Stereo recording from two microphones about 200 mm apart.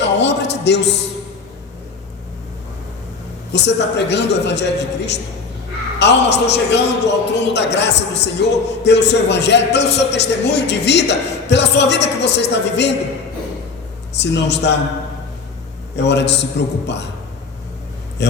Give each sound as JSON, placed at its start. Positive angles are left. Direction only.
{"t": 0.0, "sound": "a sound", "side_deg": 60}
{"t": 3.5, "sound": "a man's voice", "side_deg": 60}
{"t": 14.2, "sound": "a man's voice", "side_deg": 60}
{"t": 16.0, "sound": "a man's voice", "side_deg": 60}
{"t": 18.2, "sound": "a man's voice", "side_deg": 60}